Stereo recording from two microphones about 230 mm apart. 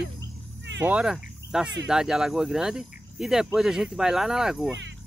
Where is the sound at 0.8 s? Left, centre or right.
Centre.